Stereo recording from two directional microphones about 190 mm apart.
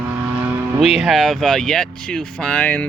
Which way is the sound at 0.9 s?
Centre (ahead or behind).